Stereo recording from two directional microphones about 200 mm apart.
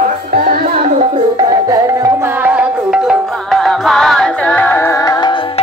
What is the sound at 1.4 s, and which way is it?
Music, 20° right (ahead or behind).